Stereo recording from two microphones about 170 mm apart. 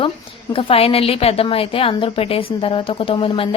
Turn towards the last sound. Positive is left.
turn(degrees=30)  # may be behind; listen again after turning